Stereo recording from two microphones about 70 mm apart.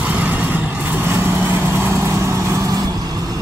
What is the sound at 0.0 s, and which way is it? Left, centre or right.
Vehicle, right.